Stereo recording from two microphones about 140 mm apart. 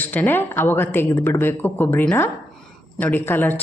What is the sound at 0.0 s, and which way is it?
A woman's voice, 10° left (ahead or behind).